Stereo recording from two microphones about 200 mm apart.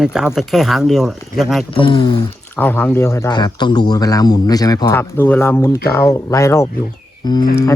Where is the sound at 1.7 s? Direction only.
25° left (ahead or behind).